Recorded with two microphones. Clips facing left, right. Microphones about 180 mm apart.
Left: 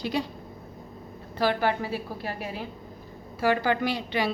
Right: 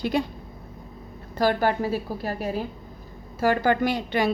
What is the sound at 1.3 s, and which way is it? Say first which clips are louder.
A woman's voice: right 3 dB; 45° right (ahead or behind).